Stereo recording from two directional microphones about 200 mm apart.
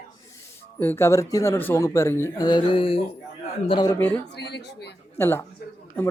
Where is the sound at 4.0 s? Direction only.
10° left (ahead or behind).